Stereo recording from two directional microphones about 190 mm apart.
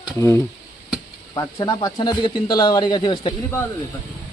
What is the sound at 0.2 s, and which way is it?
Speech, 15° left (ahead or behind).